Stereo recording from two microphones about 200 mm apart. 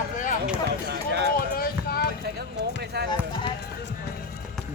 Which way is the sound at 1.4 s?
50° left (ahead or behind).